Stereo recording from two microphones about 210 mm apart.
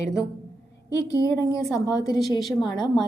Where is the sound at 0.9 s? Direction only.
15° left (ahead or behind).